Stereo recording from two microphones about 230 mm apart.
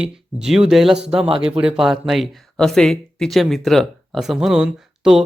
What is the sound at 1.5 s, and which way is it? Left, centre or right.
Speech, centre.